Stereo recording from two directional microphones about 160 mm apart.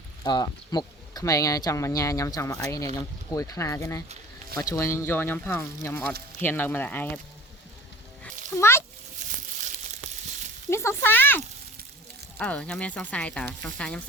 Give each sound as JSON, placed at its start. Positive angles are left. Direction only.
{"t": 0.3, "sound": "speech", "side_deg": 25}
{"t": 8.5, "sound": "a sound", "side_deg": 15}
{"t": 10.7, "sound": "speech", "side_deg": 15}